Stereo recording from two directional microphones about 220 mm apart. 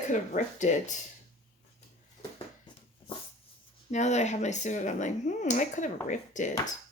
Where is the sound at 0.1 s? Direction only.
35° left (ahead or behind).